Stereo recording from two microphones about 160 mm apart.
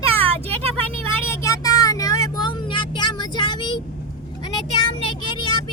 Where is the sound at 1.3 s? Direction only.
20° left (ahead or behind).